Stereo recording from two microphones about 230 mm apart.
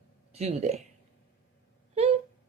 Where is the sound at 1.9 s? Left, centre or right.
Right.